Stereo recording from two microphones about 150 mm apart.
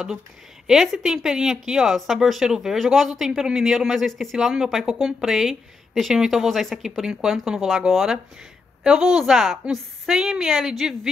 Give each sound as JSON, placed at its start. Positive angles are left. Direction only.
{"t": 0.7, "sound": "speech", "side_deg": -5}